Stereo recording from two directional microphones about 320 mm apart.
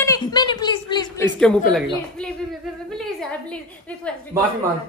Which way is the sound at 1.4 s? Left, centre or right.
Centre.